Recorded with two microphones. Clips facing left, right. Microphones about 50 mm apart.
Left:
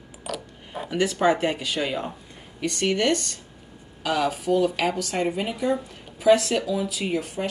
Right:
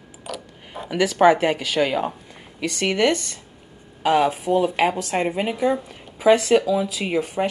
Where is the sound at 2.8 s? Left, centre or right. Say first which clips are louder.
Right 3 dB; right.